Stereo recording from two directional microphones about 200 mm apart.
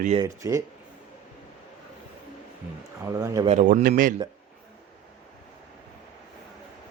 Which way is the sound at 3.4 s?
35° right (ahead or behind).